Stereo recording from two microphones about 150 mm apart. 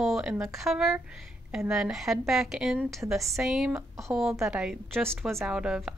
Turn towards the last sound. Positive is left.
turn(degrees=-5)  # may be behind; listen again after turning